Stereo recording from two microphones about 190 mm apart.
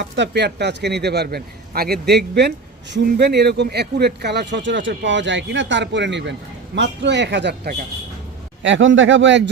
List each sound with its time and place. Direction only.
0.0 s speech: 65° right (ahead or behind)
8.6 s speech: 75° right (ahead or behind)